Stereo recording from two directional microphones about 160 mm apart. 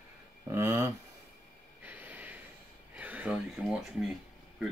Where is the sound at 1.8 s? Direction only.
10° right (ahead or behind).